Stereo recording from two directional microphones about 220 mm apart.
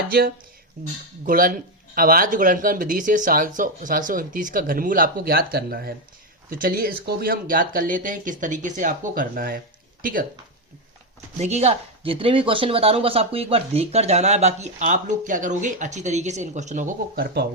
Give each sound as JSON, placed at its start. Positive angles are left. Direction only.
{"t": 0.1, "sound": "speech", "side_deg": -45}
{"t": 11.3, "sound": "speech", "side_deg": -30}